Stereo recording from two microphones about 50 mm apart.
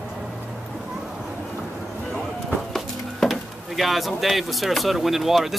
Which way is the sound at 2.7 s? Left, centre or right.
Centre.